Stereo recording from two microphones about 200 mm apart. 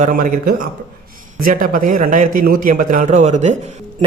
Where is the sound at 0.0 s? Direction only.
40° right (ahead or behind).